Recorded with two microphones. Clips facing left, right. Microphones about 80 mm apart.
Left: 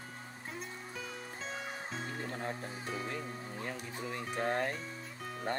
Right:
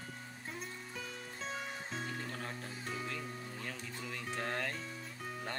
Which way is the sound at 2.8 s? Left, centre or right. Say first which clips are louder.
Left 2 dB; centre.